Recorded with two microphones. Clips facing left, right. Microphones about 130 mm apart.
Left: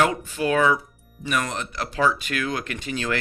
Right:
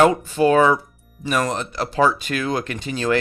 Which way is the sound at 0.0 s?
35° right (ahead or behind).